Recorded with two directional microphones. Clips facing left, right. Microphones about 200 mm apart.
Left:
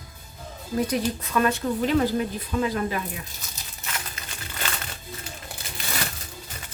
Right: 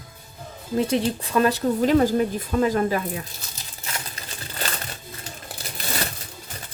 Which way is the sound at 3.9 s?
35° right (ahead or behind).